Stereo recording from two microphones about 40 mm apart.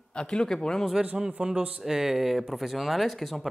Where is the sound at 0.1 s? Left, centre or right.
Left.